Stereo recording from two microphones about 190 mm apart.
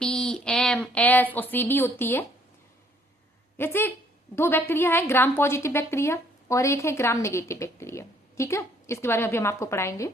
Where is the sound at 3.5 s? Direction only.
10° left (ahead or behind).